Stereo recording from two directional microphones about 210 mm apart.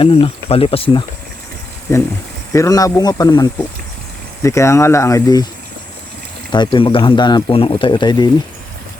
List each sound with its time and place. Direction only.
0.0 s speech: 25° left (ahead or behind)
2.5 s speech: 15° left (ahead or behind)
4.4 s speech: 15° left (ahead or behind)
6.5 s speech: 20° left (ahead or behind)